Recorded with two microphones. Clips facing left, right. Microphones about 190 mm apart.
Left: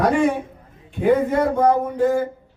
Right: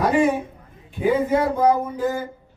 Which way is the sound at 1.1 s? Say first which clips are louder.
Left 2 dB; 55° left (ahead or behind).